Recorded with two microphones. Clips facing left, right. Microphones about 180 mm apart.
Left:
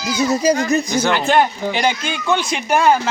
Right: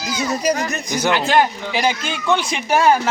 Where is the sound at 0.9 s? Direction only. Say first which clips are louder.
Left 1 dB; 15° right (ahead or behind).